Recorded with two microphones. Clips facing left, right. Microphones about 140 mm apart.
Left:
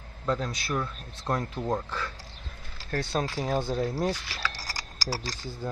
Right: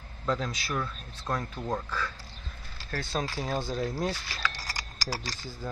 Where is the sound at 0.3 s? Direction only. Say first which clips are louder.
Left 2 dB; 10° left (ahead or behind).